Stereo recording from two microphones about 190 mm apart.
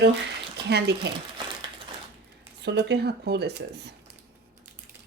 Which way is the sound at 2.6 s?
65° right (ahead or behind).